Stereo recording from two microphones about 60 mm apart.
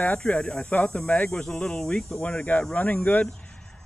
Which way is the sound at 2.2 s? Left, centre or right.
Left.